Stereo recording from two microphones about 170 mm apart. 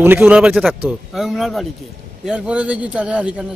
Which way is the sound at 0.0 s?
10° right (ahead or behind).